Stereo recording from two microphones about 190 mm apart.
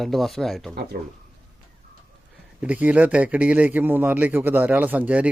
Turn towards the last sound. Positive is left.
turn(degrees=-10)  # may be behind; listen again after turning